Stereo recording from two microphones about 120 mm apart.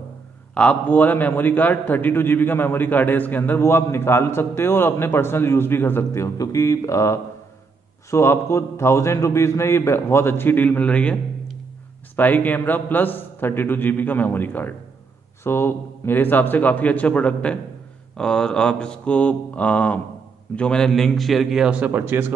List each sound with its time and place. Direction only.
0.6 s a man's voice: 10° left (ahead or behind); by 22.3 s 15° right (ahead or behind)